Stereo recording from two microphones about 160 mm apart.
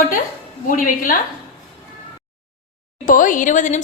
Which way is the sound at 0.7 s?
60° left (ahead or behind).